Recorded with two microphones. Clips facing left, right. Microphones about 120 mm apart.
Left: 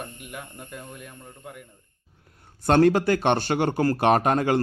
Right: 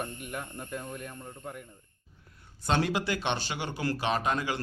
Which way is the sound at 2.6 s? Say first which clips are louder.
Left 10 dB; 50° left (ahead or behind).